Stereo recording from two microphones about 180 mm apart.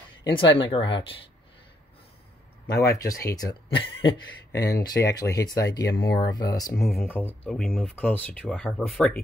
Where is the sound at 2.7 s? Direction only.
15° left (ahead or behind); by 9.2 s centre (ahead or behind).